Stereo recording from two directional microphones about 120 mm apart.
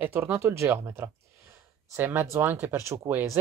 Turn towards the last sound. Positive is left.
turn(degrees=-20)  # may be behind; listen again after turning